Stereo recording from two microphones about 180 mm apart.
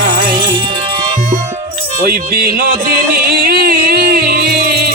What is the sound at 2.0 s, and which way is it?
Music, 55° right (ahead or behind).